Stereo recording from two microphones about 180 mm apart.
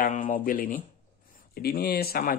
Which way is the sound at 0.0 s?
50° left (ahead or behind).